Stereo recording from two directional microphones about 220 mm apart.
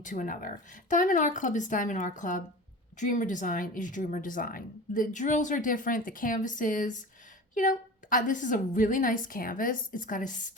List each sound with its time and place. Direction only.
0.0 s a woman's voice: 35° left (ahead or behind)